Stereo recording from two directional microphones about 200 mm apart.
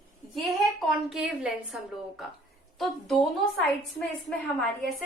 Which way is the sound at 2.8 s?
Centre (ahead or behind).